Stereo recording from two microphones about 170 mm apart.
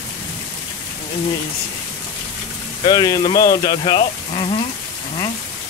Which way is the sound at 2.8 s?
25° left (ahead or behind).